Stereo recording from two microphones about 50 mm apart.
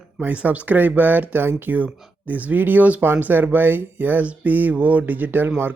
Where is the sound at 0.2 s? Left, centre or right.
Right.